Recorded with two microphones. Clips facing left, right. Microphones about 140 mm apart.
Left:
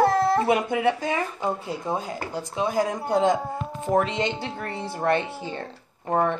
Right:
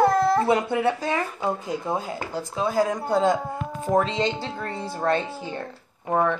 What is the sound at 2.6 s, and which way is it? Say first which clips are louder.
Speech: right 2 dB; 20° left (ahead or behind).